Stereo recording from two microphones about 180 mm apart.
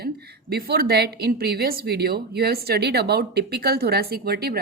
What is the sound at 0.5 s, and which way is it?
A woman's voice, 60° right (ahead or behind).